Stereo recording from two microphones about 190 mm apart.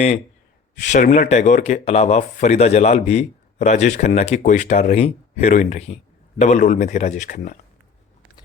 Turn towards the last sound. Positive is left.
turn(degrees=40)  # may be behind; listen again after turning